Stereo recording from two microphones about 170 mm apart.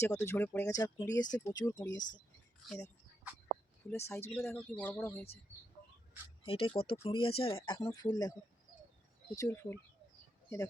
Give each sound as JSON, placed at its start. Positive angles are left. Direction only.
{"t": 0.0, "sound": "speech", "side_deg": 15}
{"t": 2.0, "sound": "speech", "side_deg": 50}
{"t": 3.8, "sound": "speech", "side_deg": 15}
{"t": 6.4, "sound": "speech", "side_deg": 30}
{"t": 9.3, "sound": "speech", "side_deg": 15}